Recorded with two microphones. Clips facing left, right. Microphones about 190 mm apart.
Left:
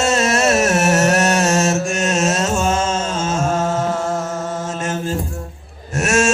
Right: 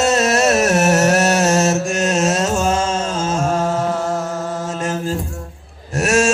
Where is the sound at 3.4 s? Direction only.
Centre (ahead or behind).